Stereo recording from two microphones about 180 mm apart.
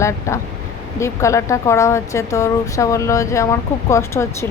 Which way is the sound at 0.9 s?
15° left (ahead or behind).